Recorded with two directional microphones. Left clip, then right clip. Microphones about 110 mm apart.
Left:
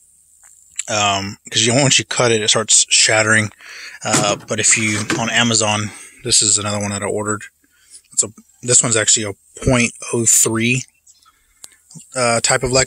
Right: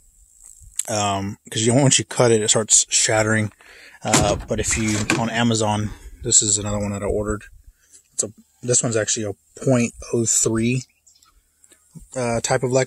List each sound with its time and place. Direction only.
0.7 s speech: 30° right (ahead or behind)
3.6 s speech: 20° right (ahead or behind)
6.0 s speech: 20° right (ahead or behind)